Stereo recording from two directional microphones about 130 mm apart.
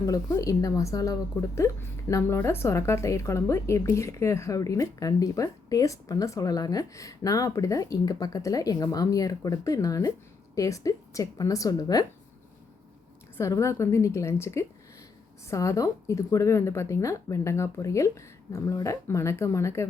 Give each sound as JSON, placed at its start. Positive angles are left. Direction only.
{"t": 0.0, "sound": "a woman's voice", "side_deg": 25}
{"t": 13.3, "sound": "a woman's voice", "side_deg": 20}